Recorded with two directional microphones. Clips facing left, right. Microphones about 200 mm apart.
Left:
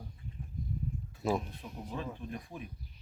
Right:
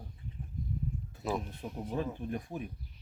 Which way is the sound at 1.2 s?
Centre (ahead or behind).